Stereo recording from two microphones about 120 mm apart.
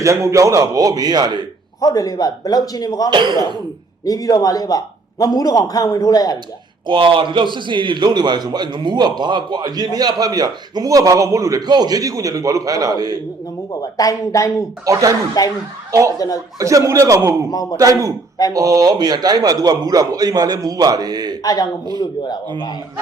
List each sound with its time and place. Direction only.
0.0 s a man's voice: 25° right (ahead or behind)
1.8 s a man's voice: 30° left (ahead or behind)
3.1 s a man's voice: 40° right (ahead or behind)
4.0 s a man's voice: 30° left (ahead or behind)
6.8 s a man's voice: 45° right (ahead or behind)
13.9 s speech: 30° left (ahead or behind)
14.9 s a man's voice: 30° right (ahead or behind)
15.4 s a man's voice: 30° left (ahead or behind)
15.9 s speech: 25° right (ahead or behind)
16.1 s a man's voice: 30° left (ahead or behind)
16.6 s a man's voice: 25° right (ahead or behind)
17.5 s a man's voice: 30° left (ahead or behind)
17.7 s a man's voice: 25° right (ahead or behind)
21.4 s a man's voice: 35° left (ahead or behind)